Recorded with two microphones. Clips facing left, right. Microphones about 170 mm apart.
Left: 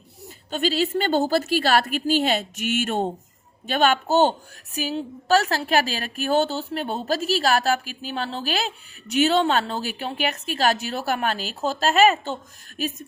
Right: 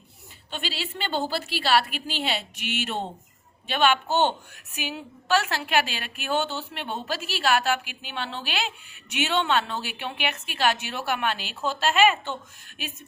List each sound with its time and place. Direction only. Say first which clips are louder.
0.5 s a woman's voice: left 11 dB; 45° left (ahead or behind)